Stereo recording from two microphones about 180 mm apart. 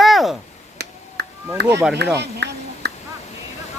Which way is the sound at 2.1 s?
65° right (ahead or behind).